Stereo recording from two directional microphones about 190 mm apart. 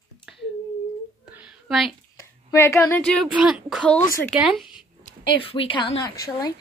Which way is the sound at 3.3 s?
5° right (ahead or behind).